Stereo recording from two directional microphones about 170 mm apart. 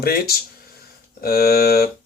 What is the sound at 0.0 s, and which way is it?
Speech, 65° left (ahead or behind).